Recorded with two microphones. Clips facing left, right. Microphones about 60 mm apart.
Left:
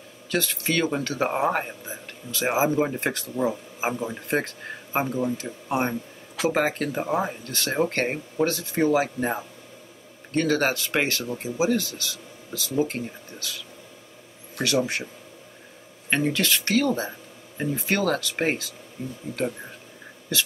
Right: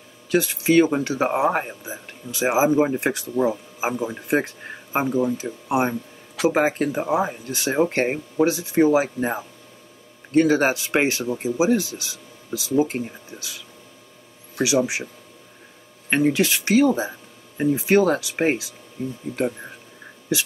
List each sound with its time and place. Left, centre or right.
0.3 s speech: centre
14.6 s speech: centre
16.1 s speech: centre
20.3 s speech: centre